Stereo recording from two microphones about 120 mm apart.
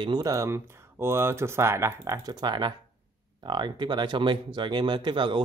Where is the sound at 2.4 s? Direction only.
35° right (ahead or behind).